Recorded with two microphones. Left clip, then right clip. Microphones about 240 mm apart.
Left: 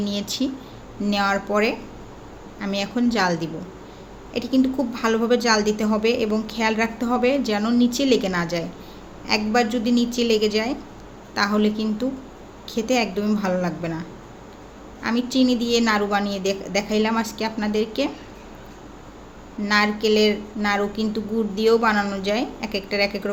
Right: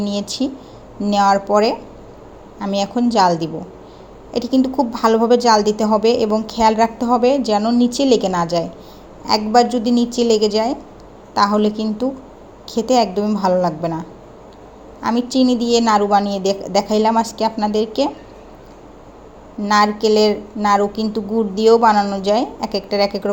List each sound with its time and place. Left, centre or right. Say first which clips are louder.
0.0 s a woman's voice: right 4 dB; centre
15.3 s a woman's voice: right 4 dB; centre
19.7 s a woman's voice: right 5 dB; centre